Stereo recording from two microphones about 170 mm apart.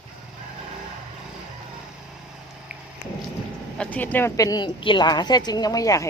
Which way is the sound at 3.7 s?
5° left (ahead or behind).